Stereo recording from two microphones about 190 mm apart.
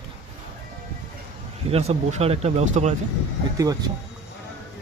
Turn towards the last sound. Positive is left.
turn(degrees=-20)  # may be behind; listen again after turning